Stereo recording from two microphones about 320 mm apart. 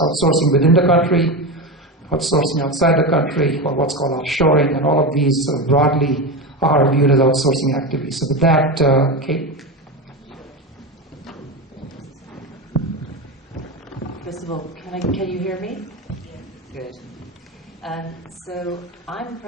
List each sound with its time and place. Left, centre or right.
0.1 s a man's voice: centre
14.3 s speech: centre
14.8 s a man's voice: centre
17.8 s a man's voice: centre